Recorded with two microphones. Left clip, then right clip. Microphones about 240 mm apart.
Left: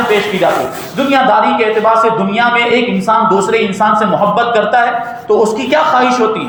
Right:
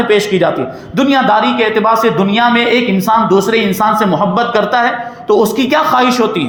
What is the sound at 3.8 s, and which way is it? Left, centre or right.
A man's voice, right.